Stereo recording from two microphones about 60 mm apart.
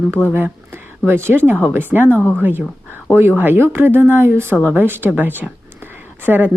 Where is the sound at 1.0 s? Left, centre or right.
Right.